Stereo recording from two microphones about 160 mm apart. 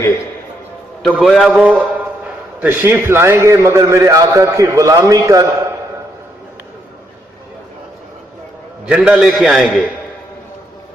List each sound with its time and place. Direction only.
1.1 s a man's voice: centre (ahead or behind); by 5.5 s 20° right (ahead or behind)
8.9 s a man's voice: 5° right (ahead or behind)